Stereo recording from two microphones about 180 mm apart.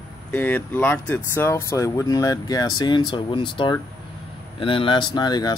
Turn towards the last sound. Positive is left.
turn(degrees=25)  # may be behind; listen again after turning